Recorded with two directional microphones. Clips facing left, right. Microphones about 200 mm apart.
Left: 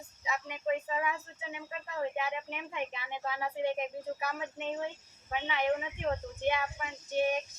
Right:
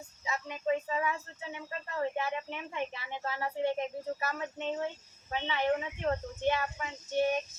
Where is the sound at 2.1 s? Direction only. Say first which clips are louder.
Right 1 dB; 15° left (ahead or behind).